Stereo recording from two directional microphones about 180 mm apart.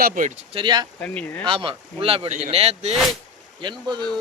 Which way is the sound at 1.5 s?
30° right (ahead or behind).